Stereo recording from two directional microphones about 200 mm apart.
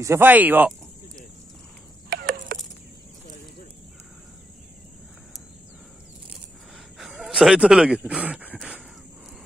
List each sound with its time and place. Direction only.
0.0 s speech: 10° right (ahead or behind)
2.0 s a sound: 55° right (ahead or behind)
7.0 s speech: centre (ahead or behind)